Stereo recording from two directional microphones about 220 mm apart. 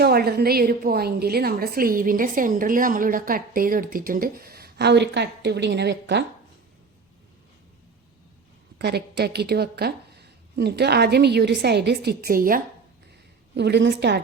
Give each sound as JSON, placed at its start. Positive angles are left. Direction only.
{"t": 0.0, "sound": "a woman's voice", "side_deg": -45}
{"t": 8.8, "sound": "a woman's voice", "side_deg": -50}
{"t": 13.6, "sound": "a woman's voice", "side_deg": -50}